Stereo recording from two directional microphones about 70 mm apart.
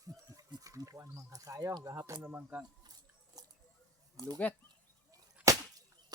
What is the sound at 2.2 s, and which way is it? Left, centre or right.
Speech, right.